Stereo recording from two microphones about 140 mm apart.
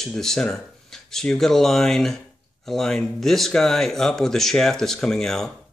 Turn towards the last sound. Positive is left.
turn(degrees=5)  # may be behind; listen again after turning